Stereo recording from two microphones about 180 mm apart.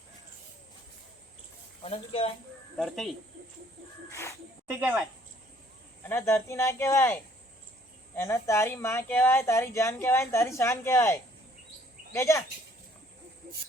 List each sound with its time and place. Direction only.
1.8 s speech: 30° left (ahead or behind)
2.7 s speech: centre (ahead or behind)
4.1 s speech: 15° left (ahead or behind)
4.7 s a woman's voice: 10° right (ahead or behind)
6.1 s speech: 10° left (ahead or behind)